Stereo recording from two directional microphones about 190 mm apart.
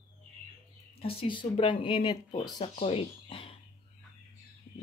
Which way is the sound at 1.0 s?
25° left (ahead or behind).